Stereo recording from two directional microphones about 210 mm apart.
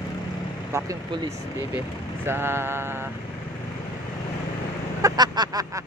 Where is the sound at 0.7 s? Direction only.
15° right (ahead or behind).